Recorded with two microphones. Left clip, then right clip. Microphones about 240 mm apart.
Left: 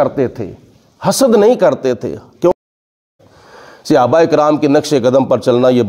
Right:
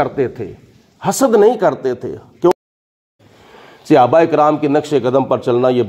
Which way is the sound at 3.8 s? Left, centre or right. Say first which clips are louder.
Even; left.